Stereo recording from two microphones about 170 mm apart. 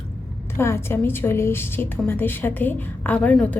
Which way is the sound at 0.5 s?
15° left (ahead or behind).